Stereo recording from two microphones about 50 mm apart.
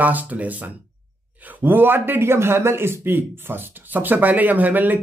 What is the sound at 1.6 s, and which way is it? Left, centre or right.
Speech, right.